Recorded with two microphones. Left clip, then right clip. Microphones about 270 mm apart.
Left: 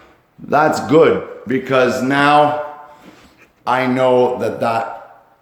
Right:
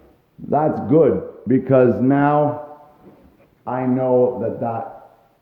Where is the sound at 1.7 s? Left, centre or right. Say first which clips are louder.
Left 1 dB; right.